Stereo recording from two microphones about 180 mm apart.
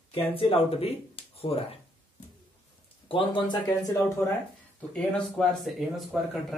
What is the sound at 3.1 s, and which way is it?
Speech, 30° left (ahead or behind).